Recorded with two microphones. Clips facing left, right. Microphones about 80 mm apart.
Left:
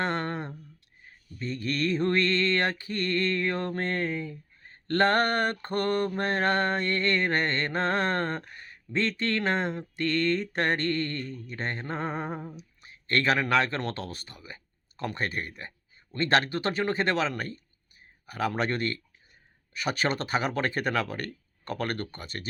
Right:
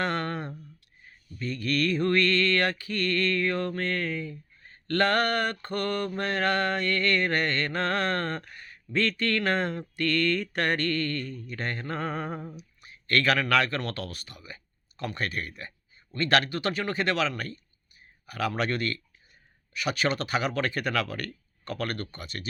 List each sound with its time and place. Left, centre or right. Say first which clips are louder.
0.0 s a sound: even; left
1.4 s mantra: right 2 dB; left
12.5 s speech: right 1 dB; left